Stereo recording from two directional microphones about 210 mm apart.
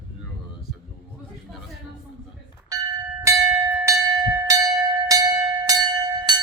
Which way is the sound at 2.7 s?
15° right (ahead or behind).